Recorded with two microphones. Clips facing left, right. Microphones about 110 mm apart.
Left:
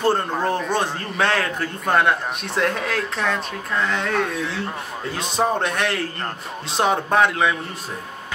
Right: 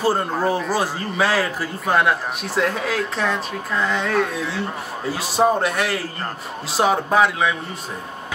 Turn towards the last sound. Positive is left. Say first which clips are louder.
# even
turn(degrees=0)  # may be behind; listen again after turning